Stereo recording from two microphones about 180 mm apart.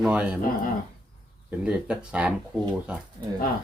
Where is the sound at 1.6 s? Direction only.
5° right (ahead or behind).